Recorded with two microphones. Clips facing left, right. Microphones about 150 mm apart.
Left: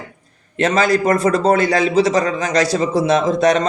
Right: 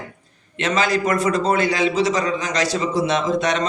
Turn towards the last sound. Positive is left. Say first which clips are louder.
# left 5 dB
turn(degrees=45)  # may be behind; listen again after turning